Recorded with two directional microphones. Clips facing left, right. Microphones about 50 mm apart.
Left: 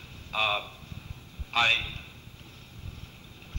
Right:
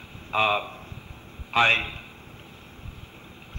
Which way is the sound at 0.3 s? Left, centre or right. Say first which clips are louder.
Right 5 dB; right.